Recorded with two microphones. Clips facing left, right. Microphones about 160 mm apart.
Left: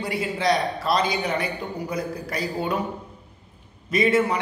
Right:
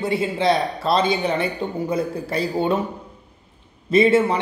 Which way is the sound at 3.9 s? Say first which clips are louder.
Right 5 dB; 30° right (ahead or behind).